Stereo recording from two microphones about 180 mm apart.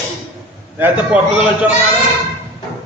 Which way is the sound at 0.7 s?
10° right (ahead or behind).